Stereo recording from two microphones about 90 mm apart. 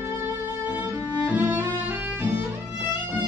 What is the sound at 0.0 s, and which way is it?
Music, 20° right (ahead or behind).